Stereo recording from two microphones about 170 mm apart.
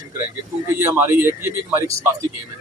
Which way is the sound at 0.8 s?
15° right (ahead or behind).